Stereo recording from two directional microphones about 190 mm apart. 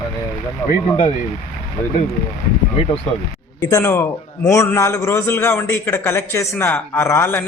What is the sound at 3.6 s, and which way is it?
A man's voice, 15° left (ahead or behind).